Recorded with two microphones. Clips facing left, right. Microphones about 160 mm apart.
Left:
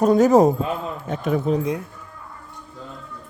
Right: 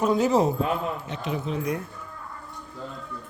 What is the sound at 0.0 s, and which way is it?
A man's voice, 45° left (ahead or behind).